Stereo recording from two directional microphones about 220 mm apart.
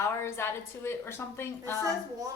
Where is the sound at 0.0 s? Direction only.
10° left (ahead or behind).